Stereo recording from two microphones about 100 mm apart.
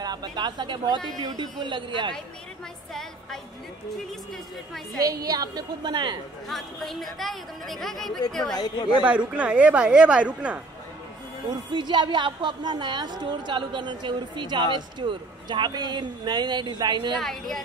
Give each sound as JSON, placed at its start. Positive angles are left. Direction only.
{"t": 0.0, "sound": "a woman's voice", "side_deg": -45}
{"t": 2.9, "sound": "a woman's voice", "side_deg": 5}
{"t": 5.0, "sound": "a woman's voice", "side_deg": -35}
{"t": 6.5, "sound": "a woman's voice", "side_deg": 0}
{"t": 8.5, "sound": "speech", "side_deg": 45}
{"t": 9.0, "sound": "speech", "side_deg": -10}
{"t": 11.7, "sound": "a woman's voice", "side_deg": -50}
{"t": 17.2, "sound": "a woman's voice", "side_deg": 5}